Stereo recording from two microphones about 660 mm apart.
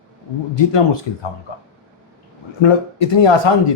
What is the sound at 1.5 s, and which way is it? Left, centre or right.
Speech, left.